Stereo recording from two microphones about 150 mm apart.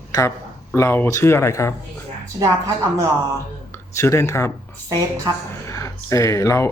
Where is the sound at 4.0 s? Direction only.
20° left (ahead or behind).